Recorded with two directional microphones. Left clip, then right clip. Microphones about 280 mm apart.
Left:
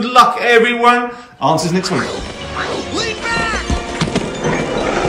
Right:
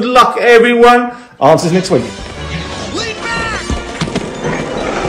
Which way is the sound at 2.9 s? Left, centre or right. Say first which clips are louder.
Even; centre.